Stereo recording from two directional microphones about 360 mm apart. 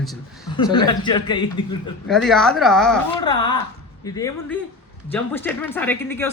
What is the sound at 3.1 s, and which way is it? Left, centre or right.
A man's voice, centre.